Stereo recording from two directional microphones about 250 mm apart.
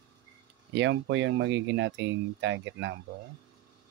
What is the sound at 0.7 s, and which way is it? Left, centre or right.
Speech, right.